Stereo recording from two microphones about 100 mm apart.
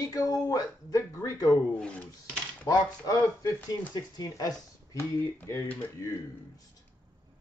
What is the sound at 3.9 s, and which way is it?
Speech, 40° left (ahead or behind).